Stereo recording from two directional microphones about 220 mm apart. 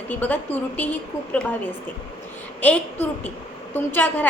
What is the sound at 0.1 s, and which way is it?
A woman's voice, 5° left (ahead or behind).